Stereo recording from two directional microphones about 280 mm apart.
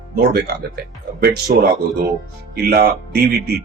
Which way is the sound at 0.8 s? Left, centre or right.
Right.